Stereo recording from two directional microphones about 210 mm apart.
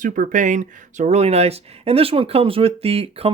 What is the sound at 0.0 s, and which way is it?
Speech, 35° right (ahead or behind).